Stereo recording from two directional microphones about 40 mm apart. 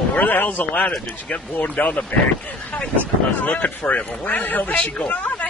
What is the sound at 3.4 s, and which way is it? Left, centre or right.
Speech, left.